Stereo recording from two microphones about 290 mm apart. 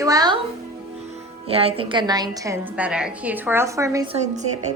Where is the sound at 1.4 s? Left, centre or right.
Centre.